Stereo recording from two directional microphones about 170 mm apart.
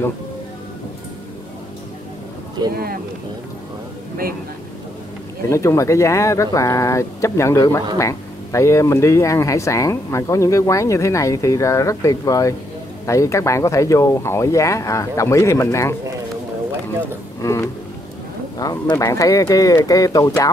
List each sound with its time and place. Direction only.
2.7 s speech: 65° right (ahead or behind)
5.5 s speech: 15° left (ahead or behind)
17.4 s a sound: 15° left (ahead or behind)
18.6 s speech: 20° left (ahead or behind)